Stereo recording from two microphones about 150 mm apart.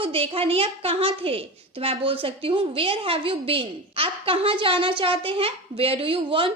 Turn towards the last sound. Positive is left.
turn(degrees=-35)  # may be behind; listen again after turning